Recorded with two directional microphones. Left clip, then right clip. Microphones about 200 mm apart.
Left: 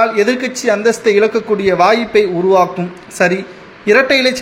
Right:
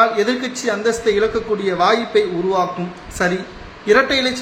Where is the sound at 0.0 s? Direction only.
25° left (ahead or behind).